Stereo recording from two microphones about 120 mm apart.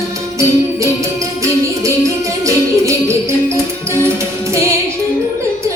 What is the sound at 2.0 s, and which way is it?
Music, 25° right (ahead or behind).